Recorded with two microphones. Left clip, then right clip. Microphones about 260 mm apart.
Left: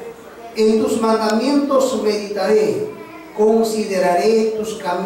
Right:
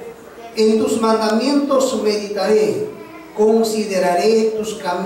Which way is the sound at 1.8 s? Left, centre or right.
Centre.